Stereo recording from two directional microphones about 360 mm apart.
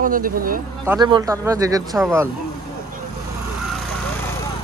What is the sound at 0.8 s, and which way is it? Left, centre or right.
Speech, centre.